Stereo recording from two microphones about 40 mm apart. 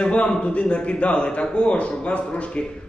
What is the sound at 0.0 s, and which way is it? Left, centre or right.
A man's voice, left.